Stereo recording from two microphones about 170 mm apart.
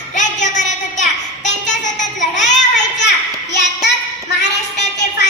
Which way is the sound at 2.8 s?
90° left.